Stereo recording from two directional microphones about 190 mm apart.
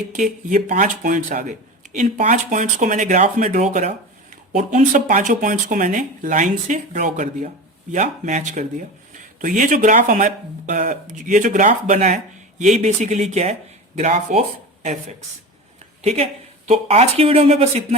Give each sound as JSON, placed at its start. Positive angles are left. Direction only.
{"t": 0.1, "sound": "speech", "side_deg": -45}
{"t": 16.0, "sound": "speech", "side_deg": -35}